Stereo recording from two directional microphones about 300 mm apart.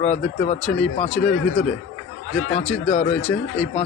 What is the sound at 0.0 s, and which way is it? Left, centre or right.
Speech, left.